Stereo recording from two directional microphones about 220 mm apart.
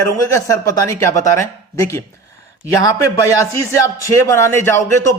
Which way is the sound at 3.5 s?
15° left (ahead or behind).